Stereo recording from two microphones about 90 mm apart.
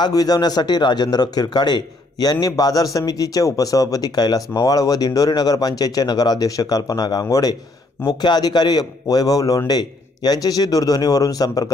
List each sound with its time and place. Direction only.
0.0 s speech: 45° left (ahead or behind)